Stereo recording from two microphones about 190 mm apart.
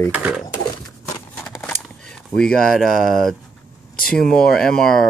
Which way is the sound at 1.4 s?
5° left (ahead or behind).